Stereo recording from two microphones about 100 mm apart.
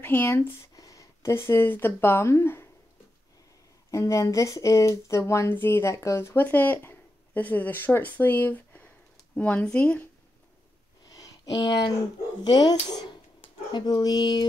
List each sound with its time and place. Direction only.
0.0 s speech: 20° left (ahead or behind)
0.7 s speech: 35° left (ahead or behind)
3.9 s speech: 30° left (ahead or behind); by 10.0 s 10° left (ahead or behind)
11.1 s a sound: 40° left (ahead or behind)
12.4 s speech: 45° left (ahead or behind)